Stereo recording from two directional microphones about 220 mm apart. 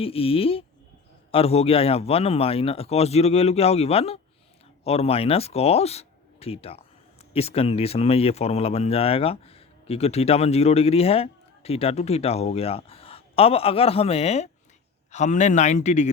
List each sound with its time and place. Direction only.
0.0 s a man's voice: 25° left (ahead or behind)